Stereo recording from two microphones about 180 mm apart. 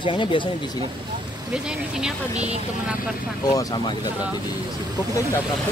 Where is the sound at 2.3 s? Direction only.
35° right (ahead or behind).